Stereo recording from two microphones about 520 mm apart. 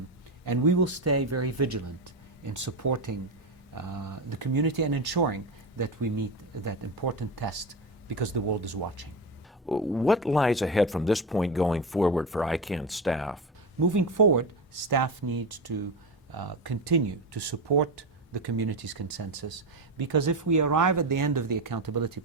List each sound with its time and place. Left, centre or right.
0.4 s speech: right
9.6 s speech: centre
13.9 s speech: right